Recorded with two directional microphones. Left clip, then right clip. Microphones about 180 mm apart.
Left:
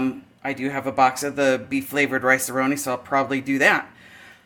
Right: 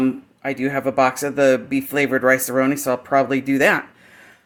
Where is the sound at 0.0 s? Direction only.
55° right (ahead or behind).